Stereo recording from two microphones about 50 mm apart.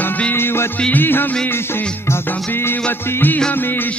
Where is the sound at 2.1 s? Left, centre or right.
Left.